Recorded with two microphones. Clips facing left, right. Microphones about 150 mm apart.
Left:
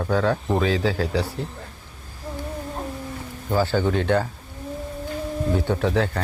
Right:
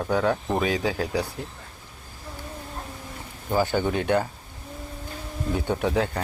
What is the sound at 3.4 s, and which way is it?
Speech, 15° right (ahead or behind).